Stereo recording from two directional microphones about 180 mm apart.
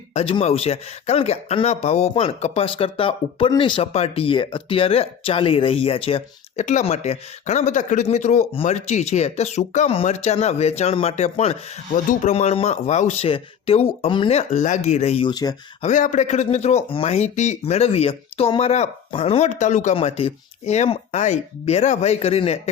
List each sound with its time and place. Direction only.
0.1 s speech: 30° left (ahead or behind)
15.8 s speech: 45° left (ahead or behind)